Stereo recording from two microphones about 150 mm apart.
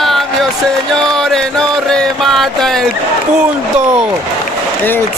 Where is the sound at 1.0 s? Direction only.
5° left (ahead or behind).